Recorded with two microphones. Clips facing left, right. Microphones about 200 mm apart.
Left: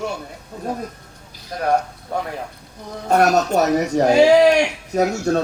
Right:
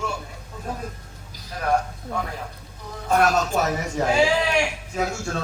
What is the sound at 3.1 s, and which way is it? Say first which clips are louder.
A man's voice: left 5 dB; 40° left (ahead or behind).